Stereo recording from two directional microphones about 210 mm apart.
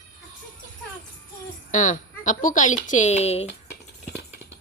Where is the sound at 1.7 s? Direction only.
35° left (ahead or behind).